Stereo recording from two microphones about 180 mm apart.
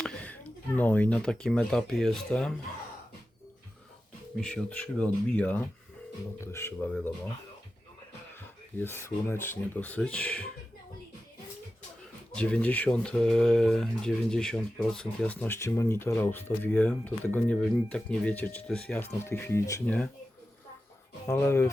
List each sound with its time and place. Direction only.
0.0 s a sound: 5° left (ahead or behind)
0.8 s speech: 10° left (ahead or behind)
4.4 s speech: 5° left (ahead or behind)
8.8 s speech: 10° left (ahead or behind)
12.3 s speech: 5° left (ahead or behind)
21.2 s speech: 15° left (ahead or behind)